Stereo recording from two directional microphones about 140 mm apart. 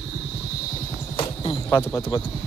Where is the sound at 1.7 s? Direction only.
25° left (ahead or behind).